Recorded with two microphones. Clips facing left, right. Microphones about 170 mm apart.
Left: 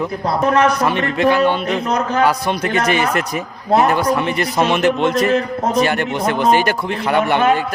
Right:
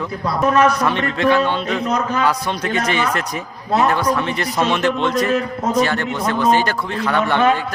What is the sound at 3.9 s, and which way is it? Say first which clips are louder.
A man's voice: left 2 dB; 10° left (ahead or behind).